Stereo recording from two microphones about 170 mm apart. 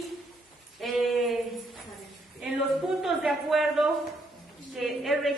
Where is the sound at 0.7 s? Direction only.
Centre (ahead or behind).